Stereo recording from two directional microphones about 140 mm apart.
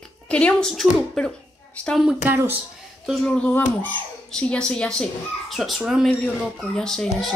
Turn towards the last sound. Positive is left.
turn(degrees=5)  # may be behind; listen again after turning